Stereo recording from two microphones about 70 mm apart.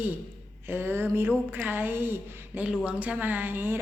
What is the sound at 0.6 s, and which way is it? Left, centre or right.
A woman's voice, right.